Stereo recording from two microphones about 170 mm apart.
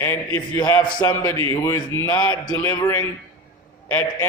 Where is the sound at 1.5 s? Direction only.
15° left (ahead or behind).